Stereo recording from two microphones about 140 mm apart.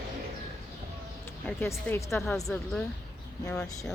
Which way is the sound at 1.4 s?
15° left (ahead or behind).